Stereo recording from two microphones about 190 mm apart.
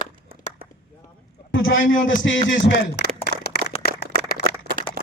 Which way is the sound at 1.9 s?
90° left.